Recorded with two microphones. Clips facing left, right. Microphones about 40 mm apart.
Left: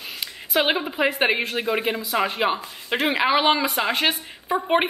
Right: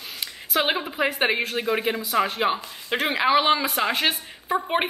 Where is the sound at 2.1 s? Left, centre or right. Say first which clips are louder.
Even; centre.